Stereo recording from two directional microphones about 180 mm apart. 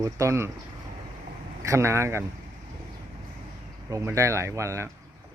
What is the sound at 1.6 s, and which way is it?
Speech, 15° right (ahead or behind).